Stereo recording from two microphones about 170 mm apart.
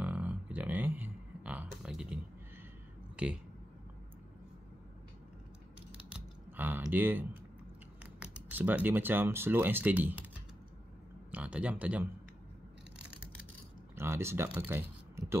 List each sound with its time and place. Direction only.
0.0 s a sound: 10° right (ahead or behind)
3.2 s speech: 5° right (ahead or behind)
6.0 s typing: 10° right (ahead or behind)
8.0 s speech: 10° right (ahead or behind)
11.3 s speech: 10° right (ahead or behind)
13.9 s speech: 15° right (ahead or behind)